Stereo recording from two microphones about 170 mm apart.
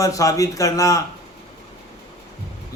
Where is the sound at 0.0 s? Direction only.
20° left (ahead or behind).